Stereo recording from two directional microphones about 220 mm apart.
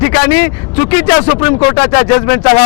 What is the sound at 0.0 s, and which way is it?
Speech, 15° left (ahead or behind).